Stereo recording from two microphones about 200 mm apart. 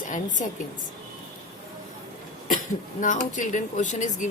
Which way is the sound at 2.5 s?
40° left (ahead or behind).